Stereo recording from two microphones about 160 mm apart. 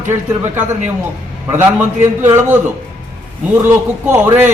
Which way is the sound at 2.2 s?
15° right (ahead or behind).